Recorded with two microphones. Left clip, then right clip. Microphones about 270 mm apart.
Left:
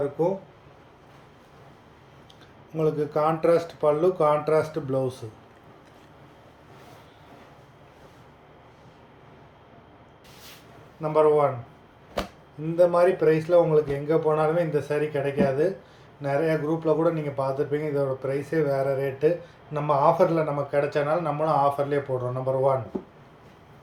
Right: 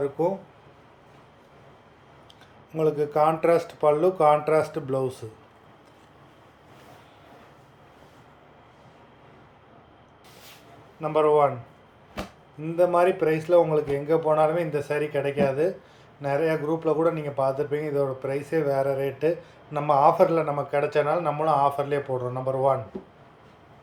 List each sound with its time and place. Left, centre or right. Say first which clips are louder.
0.0 s speech: even; centre
2.7 s speech: right 2 dB; centre
11.0 s speech: even; centre
12.2 s a sound: left 5 dB; centre
12.7 s speech: left 1 dB; centre